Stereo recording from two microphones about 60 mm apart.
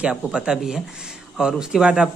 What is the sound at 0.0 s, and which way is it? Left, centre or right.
A man's voice, centre.